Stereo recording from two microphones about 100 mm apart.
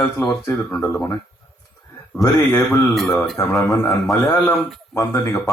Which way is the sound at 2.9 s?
Centre (ahead or behind).